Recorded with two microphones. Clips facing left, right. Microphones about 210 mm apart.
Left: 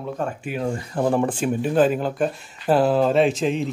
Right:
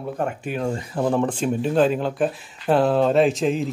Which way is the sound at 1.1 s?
10° left (ahead or behind).